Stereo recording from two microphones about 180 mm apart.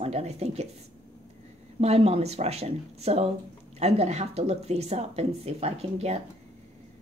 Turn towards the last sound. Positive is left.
turn(degrees=-35)  # may be behind; listen again after turning